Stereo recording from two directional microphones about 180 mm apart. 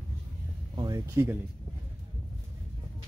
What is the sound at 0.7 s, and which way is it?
Music, 20° right (ahead or behind).